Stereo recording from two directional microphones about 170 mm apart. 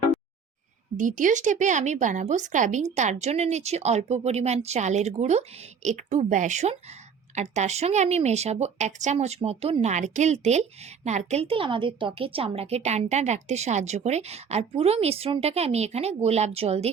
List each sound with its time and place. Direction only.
0.9 s a woman's voice: 50° right (ahead or behind)